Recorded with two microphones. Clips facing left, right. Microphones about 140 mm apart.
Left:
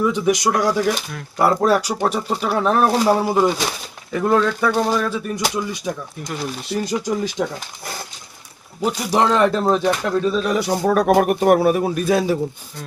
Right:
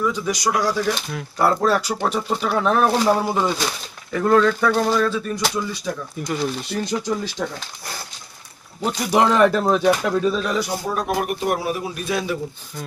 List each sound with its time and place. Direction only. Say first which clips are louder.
0.0 s speech: left 4 dB; 20° left (ahead or behind)
6.2 s speech: right 3 dB; centre (ahead or behind)
8.8 s speech: left 2 dB; 10° left (ahead or behind)
9.1 s speech: right 1 dB; 5° right (ahead or behind)
10.8 s a man's voice: left 8 dB; 60° left (ahead or behind); by 12.4 s 35° left (ahead or behind)